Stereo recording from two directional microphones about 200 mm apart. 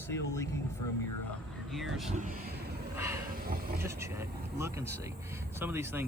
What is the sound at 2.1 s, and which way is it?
Speech, 40° right (ahead or behind).